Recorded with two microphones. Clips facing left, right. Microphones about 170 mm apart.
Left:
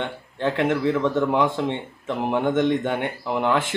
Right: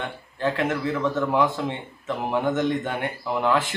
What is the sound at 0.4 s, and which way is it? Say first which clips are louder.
A man's voice: left 3 dB; 20° left (ahead or behind).